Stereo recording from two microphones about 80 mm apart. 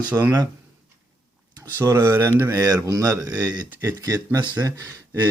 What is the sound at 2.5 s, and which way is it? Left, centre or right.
Speech, right.